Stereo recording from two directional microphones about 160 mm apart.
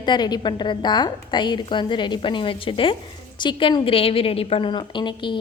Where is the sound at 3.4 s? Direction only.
30° left (ahead or behind).